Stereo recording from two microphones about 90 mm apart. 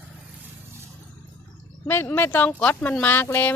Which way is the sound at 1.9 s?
25° left (ahead or behind).